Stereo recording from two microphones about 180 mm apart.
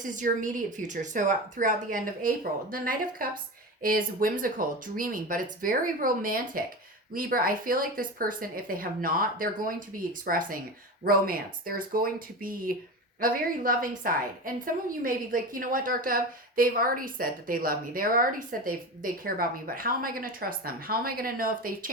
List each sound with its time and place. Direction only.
0.0 s a woman's voice: 45° right (ahead or behind)